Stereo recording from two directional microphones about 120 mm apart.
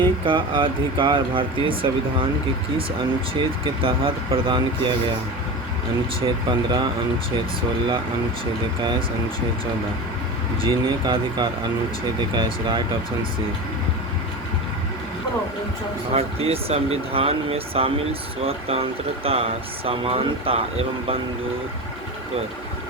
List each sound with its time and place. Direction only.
0.0 s speech: 45° right (ahead or behind)
3.3 s speech: 45° right (ahead or behind)
6.1 s speech: 45° right (ahead or behind)
10.6 s speech: 40° right (ahead or behind)
16.1 s speech: 55° right (ahead or behind)